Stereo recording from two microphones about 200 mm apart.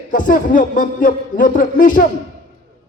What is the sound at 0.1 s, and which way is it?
A man's voice, 40° left (ahead or behind).